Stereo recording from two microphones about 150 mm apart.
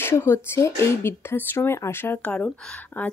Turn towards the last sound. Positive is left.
turn(degrees=10)  # may be behind; listen again after turning